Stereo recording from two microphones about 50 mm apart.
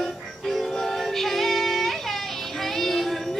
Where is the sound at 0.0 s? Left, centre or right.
Centre.